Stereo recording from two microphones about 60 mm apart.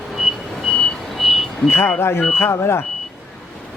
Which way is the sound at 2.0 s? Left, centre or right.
Left.